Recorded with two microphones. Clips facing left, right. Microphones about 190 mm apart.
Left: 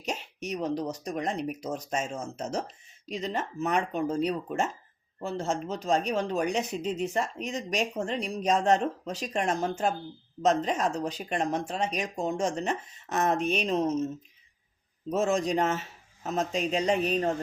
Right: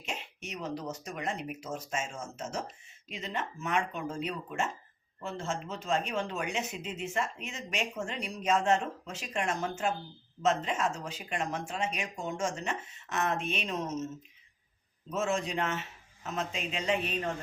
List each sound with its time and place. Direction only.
0.0 s a sound: 40° left (ahead or behind)
0.8 s speech: 35° left (ahead or behind)
15.1 s speech: 40° left (ahead or behind)